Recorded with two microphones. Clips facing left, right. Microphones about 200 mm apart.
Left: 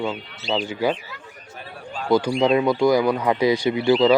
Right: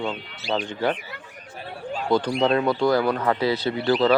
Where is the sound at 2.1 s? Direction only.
10° left (ahead or behind).